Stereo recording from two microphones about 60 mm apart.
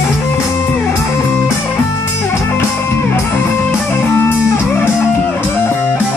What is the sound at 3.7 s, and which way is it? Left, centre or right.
Music, left.